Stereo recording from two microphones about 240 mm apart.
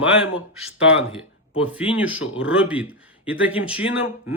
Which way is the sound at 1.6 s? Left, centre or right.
Centre.